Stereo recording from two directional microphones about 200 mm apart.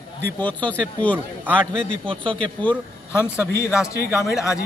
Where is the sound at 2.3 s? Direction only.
10° left (ahead or behind).